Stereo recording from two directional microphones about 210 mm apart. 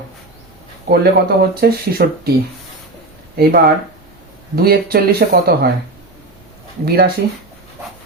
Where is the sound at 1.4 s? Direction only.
45° right (ahead or behind).